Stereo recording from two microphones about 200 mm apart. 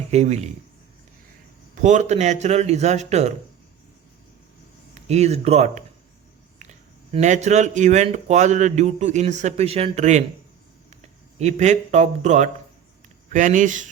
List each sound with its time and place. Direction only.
0.1 s speech: 35° right (ahead or behind)
1.7 s speech: 35° right (ahead or behind)
4.9 s speech: 35° right (ahead or behind)
11.3 s speech: 35° right (ahead or behind)